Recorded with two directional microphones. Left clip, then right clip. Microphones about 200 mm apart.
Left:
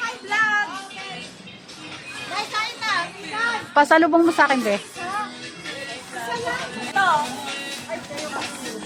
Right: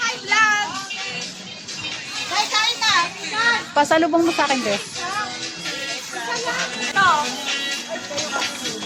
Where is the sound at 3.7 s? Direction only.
15° left (ahead or behind).